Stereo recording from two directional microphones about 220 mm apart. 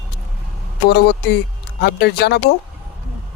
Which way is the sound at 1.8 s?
50° left (ahead or behind).